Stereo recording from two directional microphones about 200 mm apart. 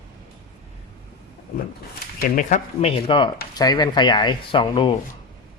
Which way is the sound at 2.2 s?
45° left (ahead or behind).